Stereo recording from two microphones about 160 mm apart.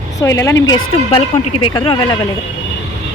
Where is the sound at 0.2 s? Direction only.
15° left (ahead or behind).